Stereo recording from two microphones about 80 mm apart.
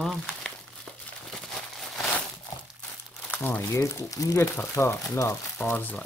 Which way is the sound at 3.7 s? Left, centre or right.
Left.